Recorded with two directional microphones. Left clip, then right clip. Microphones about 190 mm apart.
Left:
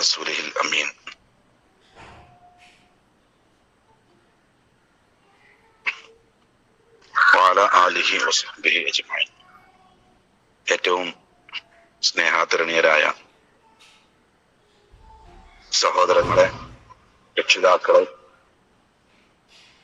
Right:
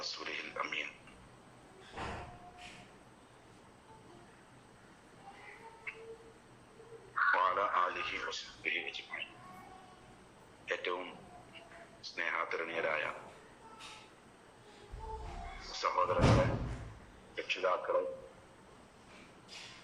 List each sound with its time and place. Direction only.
0.0 s speech: 60° left (ahead or behind)
7.1 s a man's voice: 60° left (ahead or behind)
10.7 s a man's voice: 60° left (ahead or behind)
15.7 s speech: 60° left (ahead or behind)